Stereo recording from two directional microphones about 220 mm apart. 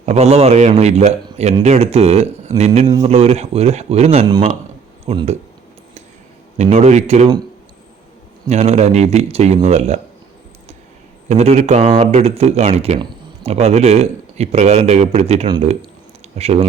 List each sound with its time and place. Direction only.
0.0 s a man's voice: 30° right (ahead or behind)
6.6 s a man's voice: 30° right (ahead or behind)
8.4 s a man's voice: 30° right (ahead or behind)
11.3 s speech: 30° right (ahead or behind)